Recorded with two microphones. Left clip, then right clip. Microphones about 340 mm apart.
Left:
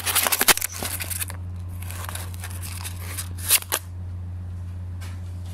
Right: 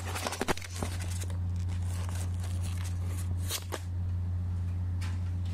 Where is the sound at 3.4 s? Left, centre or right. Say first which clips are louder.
Left 13 dB; left.